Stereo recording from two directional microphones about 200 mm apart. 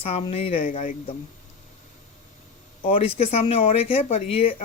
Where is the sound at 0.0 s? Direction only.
30° left (ahead or behind).